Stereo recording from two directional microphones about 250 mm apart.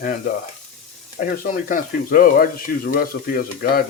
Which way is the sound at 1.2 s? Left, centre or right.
Left.